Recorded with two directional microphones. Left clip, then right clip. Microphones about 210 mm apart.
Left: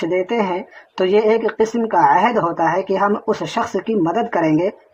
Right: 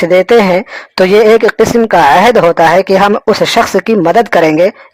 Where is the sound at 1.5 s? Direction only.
40° right (ahead or behind).